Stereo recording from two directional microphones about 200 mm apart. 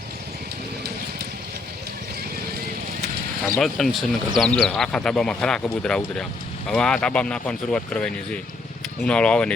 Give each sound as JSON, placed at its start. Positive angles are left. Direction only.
{"t": 3.5, "sound": "speech", "side_deg": 0}